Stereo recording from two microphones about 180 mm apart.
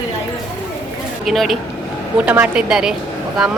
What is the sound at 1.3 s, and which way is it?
Speech, centre (ahead or behind).